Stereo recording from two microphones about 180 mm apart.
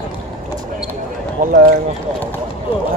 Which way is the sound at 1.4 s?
50° right (ahead or behind).